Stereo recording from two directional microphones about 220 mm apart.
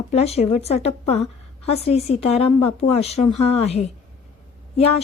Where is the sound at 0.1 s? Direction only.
30° left (ahead or behind).